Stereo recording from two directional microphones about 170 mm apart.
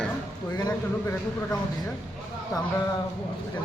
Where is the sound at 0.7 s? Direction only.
10° left (ahead or behind).